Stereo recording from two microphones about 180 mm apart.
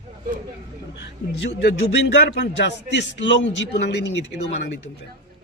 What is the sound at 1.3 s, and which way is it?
Speech, 75° left (ahead or behind).